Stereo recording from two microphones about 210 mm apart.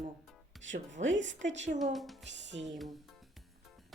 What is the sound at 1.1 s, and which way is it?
Speech, 60° right (ahead or behind).